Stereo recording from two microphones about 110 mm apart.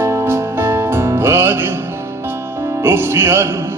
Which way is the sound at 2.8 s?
20° right (ahead or behind).